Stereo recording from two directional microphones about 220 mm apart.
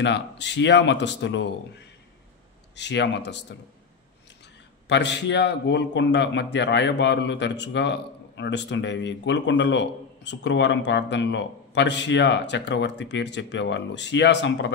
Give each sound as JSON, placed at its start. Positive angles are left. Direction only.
{"t": 0.0, "sound": "a man's voice", "side_deg": 55}
{"t": 2.7, "sound": "a man's voice", "side_deg": 50}
{"t": 4.8, "sound": "a man's voice", "side_deg": 55}